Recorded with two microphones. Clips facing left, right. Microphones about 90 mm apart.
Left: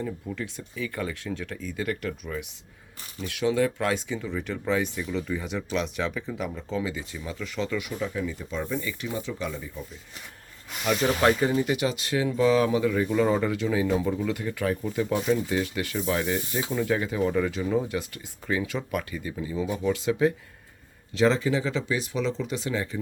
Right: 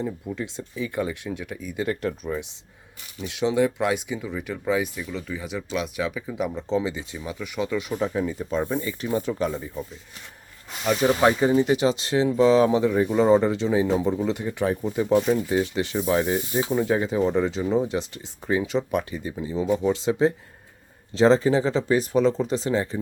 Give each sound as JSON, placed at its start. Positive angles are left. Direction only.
{"t": 0.3, "sound": "speech", "side_deg": -20}
{"t": 6.3, "sound": "speech", "side_deg": -20}
{"t": 7.8, "sound": "speech", "side_deg": -35}
{"t": 11.0, "sound": "speech", "side_deg": -15}